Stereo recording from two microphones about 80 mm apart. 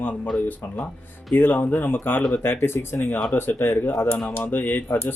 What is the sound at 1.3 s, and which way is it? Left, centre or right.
Speech, left.